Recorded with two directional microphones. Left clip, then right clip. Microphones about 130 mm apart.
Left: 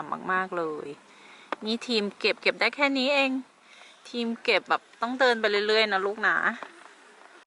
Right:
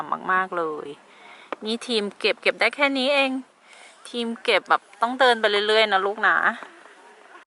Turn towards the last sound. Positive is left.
turn(degrees=-25)  # may be behind; listen again after turning